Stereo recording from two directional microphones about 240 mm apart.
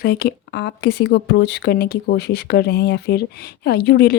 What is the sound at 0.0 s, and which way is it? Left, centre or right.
Speech, left.